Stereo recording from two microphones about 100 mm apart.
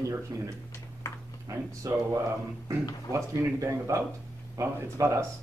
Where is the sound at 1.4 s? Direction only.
35° right (ahead or behind).